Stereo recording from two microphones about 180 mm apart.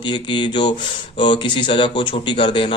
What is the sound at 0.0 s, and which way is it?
Speech, 25° left (ahead or behind).